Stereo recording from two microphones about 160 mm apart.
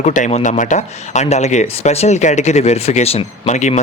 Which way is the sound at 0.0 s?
50° left (ahead or behind).